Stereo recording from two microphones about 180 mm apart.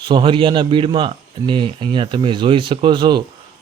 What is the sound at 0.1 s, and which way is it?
Speech, 25° right (ahead or behind).